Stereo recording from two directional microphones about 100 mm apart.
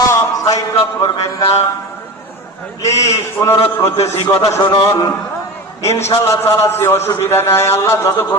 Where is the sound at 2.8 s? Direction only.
30° left (ahead or behind).